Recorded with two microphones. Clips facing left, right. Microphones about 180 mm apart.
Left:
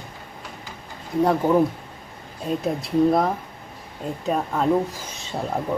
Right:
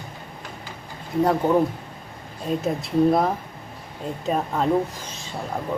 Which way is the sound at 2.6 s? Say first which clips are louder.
Even; centre (ahead or behind).